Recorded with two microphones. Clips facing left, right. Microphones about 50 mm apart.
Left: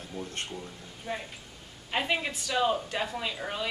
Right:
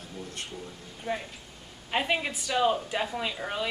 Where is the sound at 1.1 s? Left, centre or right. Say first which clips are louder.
Right 3 dB; right.